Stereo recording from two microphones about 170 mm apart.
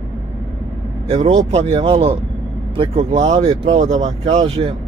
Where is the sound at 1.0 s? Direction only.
40° right (ahead or behind).